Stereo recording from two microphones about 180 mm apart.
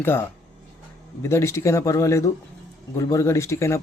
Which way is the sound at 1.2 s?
15° left (ahead or behind).